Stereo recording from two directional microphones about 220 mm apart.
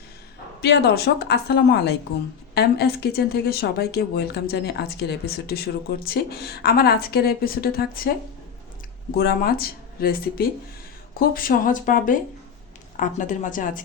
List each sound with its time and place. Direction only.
0.6 s speech: 50° left (ahead or behind)
9.1 s speech: 45° left (ahead or behind)